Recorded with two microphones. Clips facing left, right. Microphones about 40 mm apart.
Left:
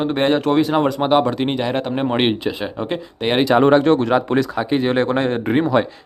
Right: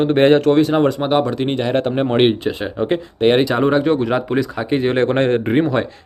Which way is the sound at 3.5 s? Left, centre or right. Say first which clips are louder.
Left 4 dB; centre.